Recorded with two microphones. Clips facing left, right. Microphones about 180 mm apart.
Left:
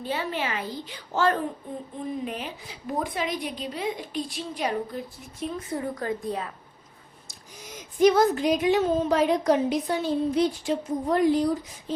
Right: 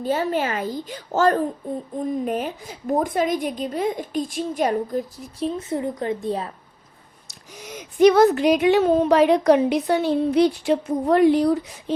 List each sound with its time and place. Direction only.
0.0 s a woman's voice: 45° right (ahead or behind)
1.6 s a sound: 35° right (ahead or behind)
2.2 s a woman's voice: 45° right (ahead or behind)
5.5 s a woman's voice: 25° right (ahead or behind)
7.3 s speech: 70° right (ahead or behind)